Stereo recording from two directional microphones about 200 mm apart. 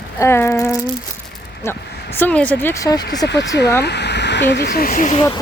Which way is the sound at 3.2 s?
60° left (ahead or behind).